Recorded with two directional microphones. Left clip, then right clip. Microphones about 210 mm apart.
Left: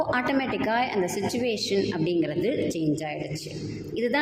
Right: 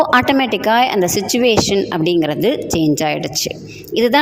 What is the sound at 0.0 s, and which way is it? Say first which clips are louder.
A woman's voice: right 12 dB; 45° right (ahead or behind).